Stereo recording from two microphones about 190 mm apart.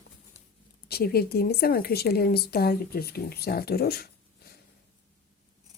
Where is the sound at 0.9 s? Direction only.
55° left (ahead or behind).